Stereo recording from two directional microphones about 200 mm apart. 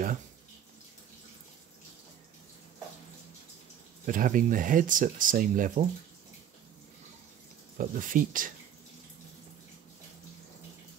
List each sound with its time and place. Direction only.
4.0 s speech: 40° right (ahead or behind)
7.7 s speech: 40° right (ahead or behind)